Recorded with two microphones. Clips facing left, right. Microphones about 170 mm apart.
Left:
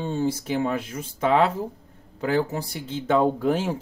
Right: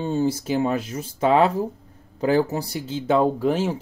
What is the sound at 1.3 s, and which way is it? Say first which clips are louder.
Speech: right 3 dB; 40° right (ahead or behind).